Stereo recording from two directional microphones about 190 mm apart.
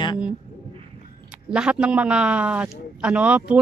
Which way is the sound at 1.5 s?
5° right (ahead or behind).